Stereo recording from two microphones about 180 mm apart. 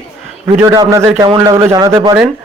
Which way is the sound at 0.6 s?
20° right (ahead or behind).